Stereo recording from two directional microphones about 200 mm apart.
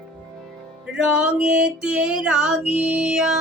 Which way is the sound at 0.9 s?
5° right (ahead or behind).